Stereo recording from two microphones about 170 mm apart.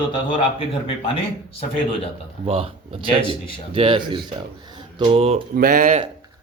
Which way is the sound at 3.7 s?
30° right (ahead or behind).